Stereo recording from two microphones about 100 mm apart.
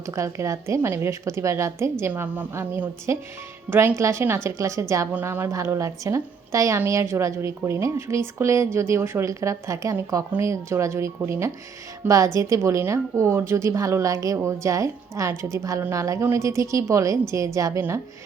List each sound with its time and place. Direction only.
0.0 s a woman's voice: 30° right (ahead or behind)